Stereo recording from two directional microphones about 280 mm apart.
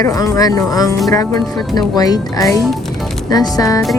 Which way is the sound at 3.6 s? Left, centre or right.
Centre.